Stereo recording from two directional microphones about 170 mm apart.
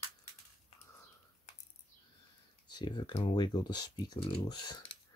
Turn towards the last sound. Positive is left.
turn(degrees=25)  # may be behind; listen again after turning